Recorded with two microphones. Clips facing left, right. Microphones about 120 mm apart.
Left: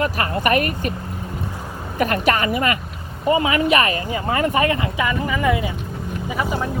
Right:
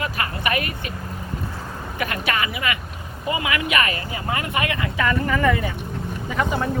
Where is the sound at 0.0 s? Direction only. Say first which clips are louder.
Left 5 dB; 45° left (ahead or behind).